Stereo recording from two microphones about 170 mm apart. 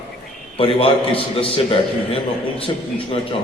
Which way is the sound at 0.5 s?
30° left (ahead or behind).